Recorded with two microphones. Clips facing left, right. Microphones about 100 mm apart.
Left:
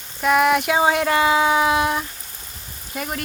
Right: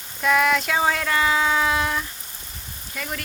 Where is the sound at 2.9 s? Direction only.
30° left (ahead or behind).